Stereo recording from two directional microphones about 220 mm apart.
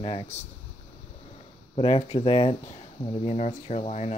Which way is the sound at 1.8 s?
25° left (ahead or behind).